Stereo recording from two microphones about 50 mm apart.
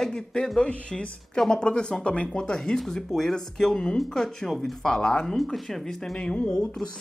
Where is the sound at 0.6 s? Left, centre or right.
Left.